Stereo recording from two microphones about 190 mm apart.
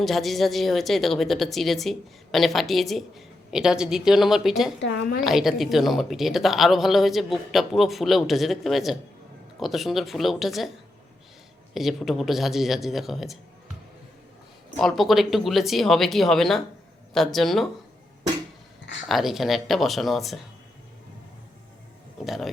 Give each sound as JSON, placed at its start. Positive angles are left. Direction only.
{"t": 0.0, "sound": "a woman's voice", "side_deg": 0}
{"t": 4.8, "sound": "a woman's voice", "side_deg": 55}
{"t": 5.2, "sound": "a woman's voice", "side_deg": 0}
{"t": 11.7, "sound": "a woman's voice", "side_deg": 0}
{"t": 14.8, "sound": "a woman's voice", "side_deg": 0}
{"t": 19.0, "sound": "a woman's voice", "side_deg": 0}
{"t": 22.2, "sound": "a woman's voice", "side_deg": 0}